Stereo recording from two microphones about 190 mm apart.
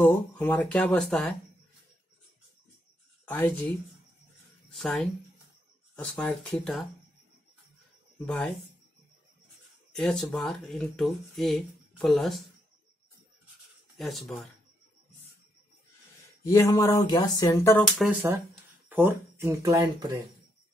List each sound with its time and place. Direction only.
0.0 s a sound: 10° left (ahead or behind)
3.3 s speech: 10° left (ahead or behind)
4.6 s speech: 5° left (ahead or behind)
8.3 s speech: 5° left (ahead or behind)
9.9 s speech: 5° left (ahead or behind)
13.9 s speech: centre (ahead or behind)
16.4 s a sound: 15° left (ahead or behind)
17.9 s speech: centre (ahead or behind); by 20.1 s 20° right (ahead or behind)